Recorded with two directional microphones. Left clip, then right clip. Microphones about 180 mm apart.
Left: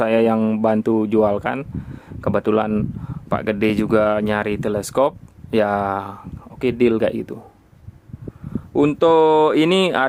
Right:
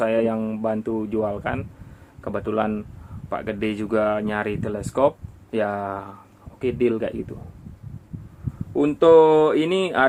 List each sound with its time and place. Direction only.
0.0 s speech: 65° left (ahead or behind)
8.7 s speech: 65° left (ahead or behind)